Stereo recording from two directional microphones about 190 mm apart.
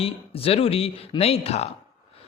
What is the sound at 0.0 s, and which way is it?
Speech, 30° left (ahead or behind).